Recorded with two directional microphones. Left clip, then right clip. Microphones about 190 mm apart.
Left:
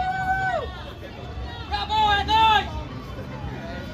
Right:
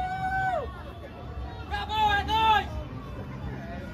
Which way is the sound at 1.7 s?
35° right (ahead or behind).